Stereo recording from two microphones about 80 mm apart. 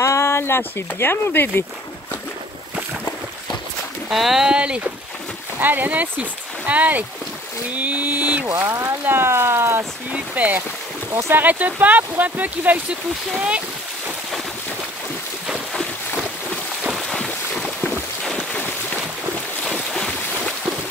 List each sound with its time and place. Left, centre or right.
0.0 s speech: left
4.1 s speech: centre; by 8.5 s right
8.5 s speech: right
10.1 s speech: centre
11.1 s speech: right
11.4 s speech: centre
16.9 s boat: centre
19.6 s boat: centre